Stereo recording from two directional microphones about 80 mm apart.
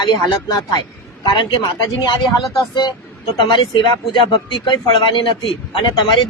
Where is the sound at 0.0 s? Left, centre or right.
Left.